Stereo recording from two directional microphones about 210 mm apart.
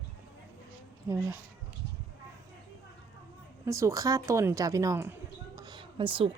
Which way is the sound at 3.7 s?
15° right (ahead or behind).